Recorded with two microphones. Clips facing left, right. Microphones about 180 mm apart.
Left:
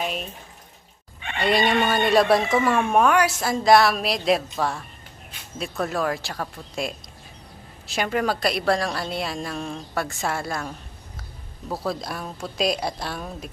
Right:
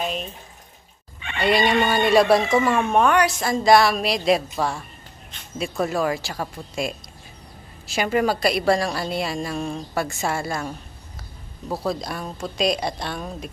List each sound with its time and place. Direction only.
0.0 s water tap: 5° left (ahead or behind)
1.4 s speech: centre (ahead or behind)
11.7 s speech: centre (ahead or behind)